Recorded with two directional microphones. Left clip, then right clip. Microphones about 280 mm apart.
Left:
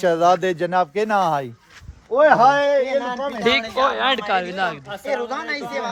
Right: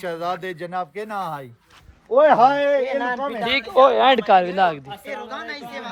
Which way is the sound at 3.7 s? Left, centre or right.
Centre.